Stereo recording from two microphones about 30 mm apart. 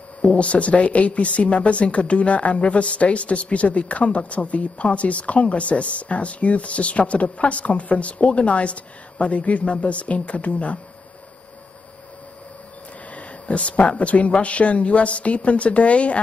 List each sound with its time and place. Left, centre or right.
0.2 s a woman's voice: left
13.1 s a woman's voice: left